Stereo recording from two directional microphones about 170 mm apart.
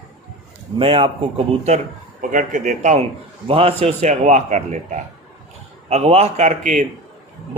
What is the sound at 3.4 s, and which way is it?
Speech, 35° right (ahead or behind).